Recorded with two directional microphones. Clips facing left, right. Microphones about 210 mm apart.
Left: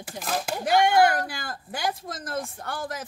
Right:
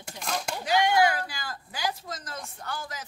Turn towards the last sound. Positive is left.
turn(degrees=55)  # may be behind; listen again after turning